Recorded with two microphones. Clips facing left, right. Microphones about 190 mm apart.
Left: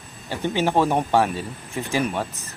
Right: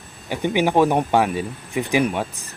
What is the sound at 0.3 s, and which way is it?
A man's voice, 15° right (ahead or behind).